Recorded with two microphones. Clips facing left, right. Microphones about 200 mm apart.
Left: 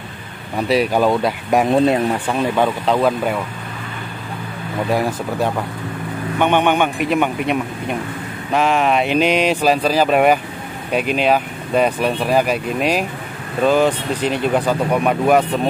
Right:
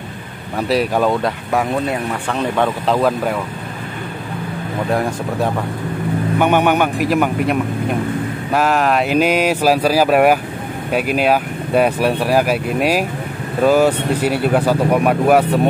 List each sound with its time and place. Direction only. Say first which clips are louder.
0.6 s speech: even; centre (ahead or behind)
1.5 s speech: left 6 dB; 20° left (ahead or behind)
2.3 s speech: right 2 dB; 5° left (ahead or behind)
4.9 s speech: even; centre (ahead or behind)